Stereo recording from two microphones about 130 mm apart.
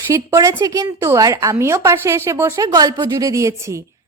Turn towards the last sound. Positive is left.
turn(degrees=-20)  # may be behind; listen again after turning